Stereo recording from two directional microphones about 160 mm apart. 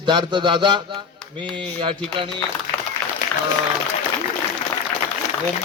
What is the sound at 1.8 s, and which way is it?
Speech, 30° right (ahead or behind).